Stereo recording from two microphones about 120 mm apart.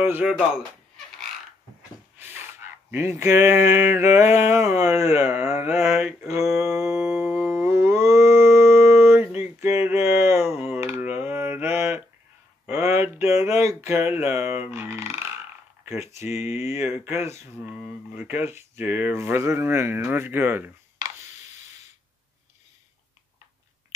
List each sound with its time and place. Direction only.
0.2 s speech: 5° right (ahead or behind)
2.1 s speech: 20° right (ahead or behind)
6.5 s a sound: 25° right (ahead or behind)
11.1 s mantra: 15° right (ahead or behind)
12.6 s a sound: 20° right (ahead or behind)
16.4 s speech: 20° right (ahead or behind)